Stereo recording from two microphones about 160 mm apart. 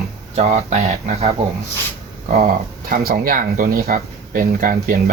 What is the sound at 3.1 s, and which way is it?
Speech, 65° right (ahead or behind).